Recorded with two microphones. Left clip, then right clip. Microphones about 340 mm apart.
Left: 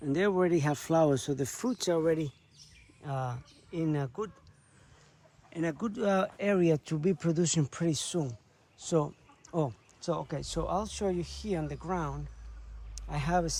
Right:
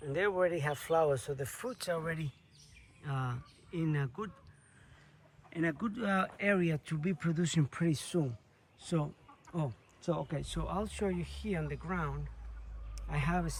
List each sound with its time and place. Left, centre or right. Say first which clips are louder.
0.1 s speech: left 3 dB; centre
5.5 s speech: left 1 dB; centre